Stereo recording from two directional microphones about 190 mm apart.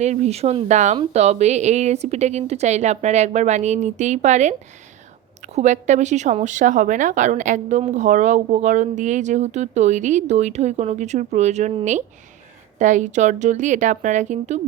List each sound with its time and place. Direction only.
0.0 s a woman's voice: 35° right (ahead or behind)
5.5 s a woman's voice: 40° right (ahead or behind)